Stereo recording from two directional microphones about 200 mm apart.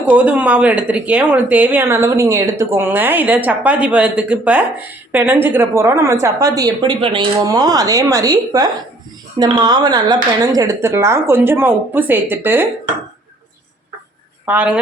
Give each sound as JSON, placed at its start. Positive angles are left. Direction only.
{"t": 0.0, "sound": "speech", "side_deg": -10}
{"t": 14.4, "sound": "speech", "side_deg": -10}